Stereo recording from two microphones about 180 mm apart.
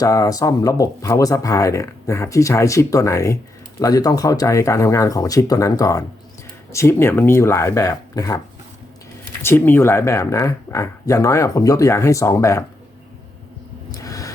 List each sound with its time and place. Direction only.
0.0 s speech: 20° left (ahead or behind)
9.4 s speech: 10° left (ahead or behind)
13.9 s a sound: 20° left (ahead or behind)